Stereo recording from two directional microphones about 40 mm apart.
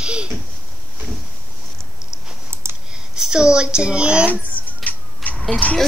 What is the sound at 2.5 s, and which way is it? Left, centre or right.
Clicking, right.